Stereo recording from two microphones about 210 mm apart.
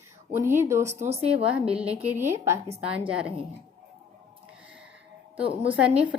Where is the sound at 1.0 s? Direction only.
30° right (ahead or behind).